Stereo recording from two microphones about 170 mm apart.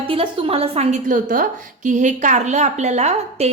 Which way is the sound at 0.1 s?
35° right (ahead or behind).